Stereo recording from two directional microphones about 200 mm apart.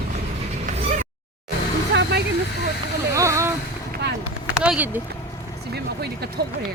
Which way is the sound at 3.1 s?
15° right (ahead or behind).